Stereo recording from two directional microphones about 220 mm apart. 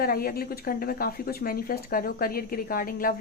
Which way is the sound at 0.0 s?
40° left (ahead or behind).